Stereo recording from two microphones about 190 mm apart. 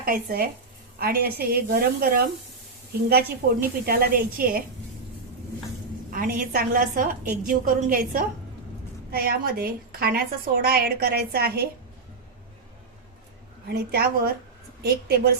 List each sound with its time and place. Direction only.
0.0 s a woman's voice: 50° right (ahead or behind)
6.1 s a woman's voice: 45° right (ahead or behind)
14.8 s a woman's voice: 55° right (ahead or behind)